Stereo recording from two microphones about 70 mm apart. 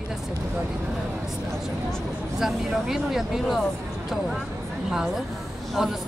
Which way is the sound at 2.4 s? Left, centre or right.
Centre.